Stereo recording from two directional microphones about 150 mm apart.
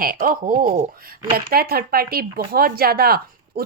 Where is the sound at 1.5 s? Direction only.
90° right.